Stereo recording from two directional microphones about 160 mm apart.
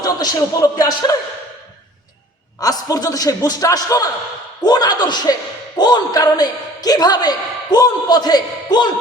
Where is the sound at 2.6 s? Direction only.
25° left (ahead or behind).